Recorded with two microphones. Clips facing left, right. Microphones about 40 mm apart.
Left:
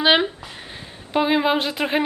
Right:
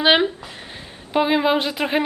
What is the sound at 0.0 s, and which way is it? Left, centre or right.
Speech, centre.